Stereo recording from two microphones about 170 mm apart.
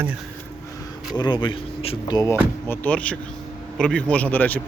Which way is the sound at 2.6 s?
10° left (ahead or behind).